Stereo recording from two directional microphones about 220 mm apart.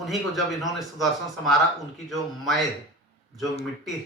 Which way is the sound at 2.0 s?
Centre (ahead or behind).